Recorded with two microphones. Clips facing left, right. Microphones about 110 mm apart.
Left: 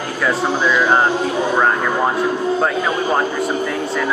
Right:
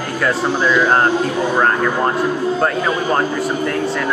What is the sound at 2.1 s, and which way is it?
Speech, centre (ahead or behind).